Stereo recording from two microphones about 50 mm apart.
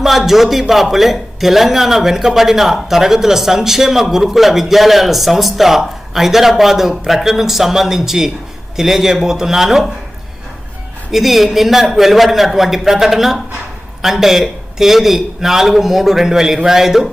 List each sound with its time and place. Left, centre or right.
0.0 s a man's voice: centre
11.1 s a man's voice: centre